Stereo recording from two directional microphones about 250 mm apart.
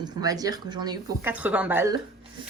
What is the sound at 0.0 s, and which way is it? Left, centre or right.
A woman's voice, centre.